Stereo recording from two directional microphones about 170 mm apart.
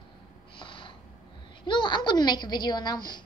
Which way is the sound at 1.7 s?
30° left (ahead or behind).